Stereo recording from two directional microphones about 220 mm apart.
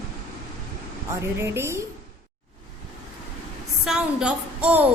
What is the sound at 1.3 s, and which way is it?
Speech, 10° right (ahead or behind).